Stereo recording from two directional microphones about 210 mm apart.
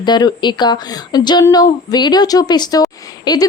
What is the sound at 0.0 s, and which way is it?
A woman's voice, 20° left (ahead or behind).